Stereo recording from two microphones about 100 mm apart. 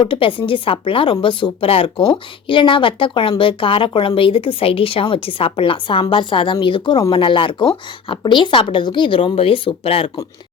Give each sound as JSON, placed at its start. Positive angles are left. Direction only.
{"t": 0.0, "sound": "speech", "side_deg": 60}